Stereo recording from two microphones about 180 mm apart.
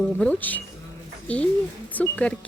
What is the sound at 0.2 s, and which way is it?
Speech, 10° left (ahead or behind).